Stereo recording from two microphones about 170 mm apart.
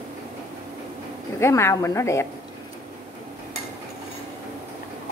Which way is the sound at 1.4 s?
15° left (ahead or behind).